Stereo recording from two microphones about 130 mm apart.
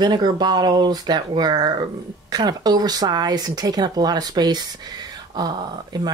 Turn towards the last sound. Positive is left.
turn(degrees=-35)  # may be behind; listen again after turning